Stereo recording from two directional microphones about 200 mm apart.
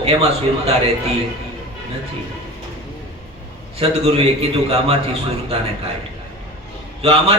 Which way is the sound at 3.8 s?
30° right (ahead or behind).